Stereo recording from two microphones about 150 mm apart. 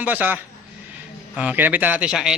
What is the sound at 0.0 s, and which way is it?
Speech, 10° right (ahead or behind).